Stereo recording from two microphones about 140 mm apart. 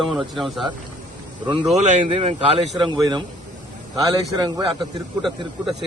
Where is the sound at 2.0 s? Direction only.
45° right (ahead or behind).